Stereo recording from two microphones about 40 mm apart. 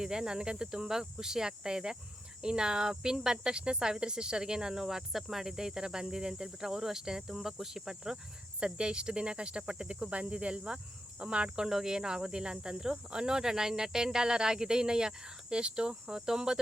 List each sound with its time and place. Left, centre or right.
0.0 s speech: centre